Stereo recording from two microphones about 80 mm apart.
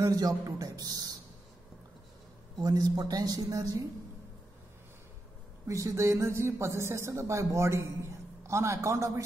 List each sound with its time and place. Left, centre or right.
0.0 s a woman's voice: right
2.5 s a woman's voice: right
5.7 s speech: right